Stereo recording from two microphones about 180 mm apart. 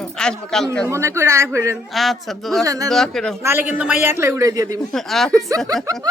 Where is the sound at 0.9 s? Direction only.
15° right (ahead or behind).